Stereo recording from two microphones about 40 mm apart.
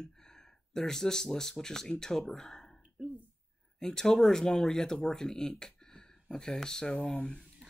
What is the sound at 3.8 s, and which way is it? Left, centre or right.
Speech, centre.